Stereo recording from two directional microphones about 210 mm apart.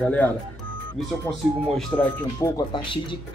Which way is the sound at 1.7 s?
5° left (ahead or behind).